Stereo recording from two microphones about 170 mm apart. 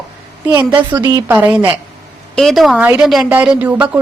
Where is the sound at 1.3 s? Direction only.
10° right (ahead or behind).